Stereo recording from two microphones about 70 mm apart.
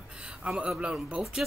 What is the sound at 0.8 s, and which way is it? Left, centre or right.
Speech, centre.